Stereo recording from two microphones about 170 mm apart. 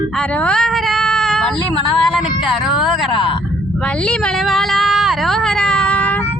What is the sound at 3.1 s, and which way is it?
Speech, 30° left (ahead or behind).